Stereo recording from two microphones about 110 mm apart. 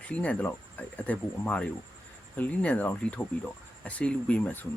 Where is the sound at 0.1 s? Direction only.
15° left (ahead or behind).